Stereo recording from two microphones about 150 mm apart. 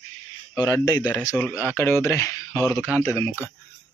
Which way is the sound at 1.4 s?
10° left (ahead or behind).